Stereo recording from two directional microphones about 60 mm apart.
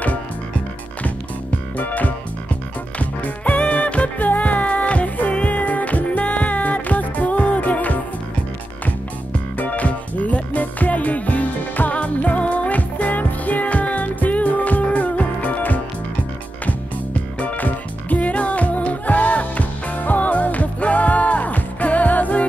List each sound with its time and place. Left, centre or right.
1.8 s music: left
9.6 s music: left
17.4 s music: left